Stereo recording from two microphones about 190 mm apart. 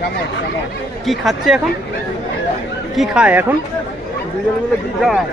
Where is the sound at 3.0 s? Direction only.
5° right (ahead or behind).